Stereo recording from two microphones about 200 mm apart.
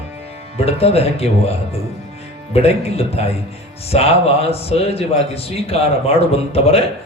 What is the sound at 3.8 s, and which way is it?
A man's voice, 30° left (ahead or behind).